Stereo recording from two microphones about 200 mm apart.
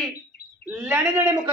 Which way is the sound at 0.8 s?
10° right (ahead or behind).